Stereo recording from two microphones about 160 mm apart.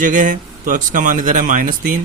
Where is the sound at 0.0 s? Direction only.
55° right (ahead or behind).